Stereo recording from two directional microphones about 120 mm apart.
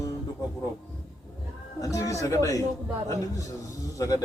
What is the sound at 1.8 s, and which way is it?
Speech, 30° left (ahead or behind).